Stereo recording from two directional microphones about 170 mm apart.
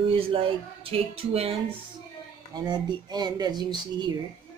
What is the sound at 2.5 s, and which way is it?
Speech, 25° right (ahead or behind).